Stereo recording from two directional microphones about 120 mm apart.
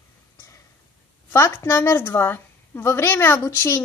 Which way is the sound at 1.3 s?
20° left (ahead or behind).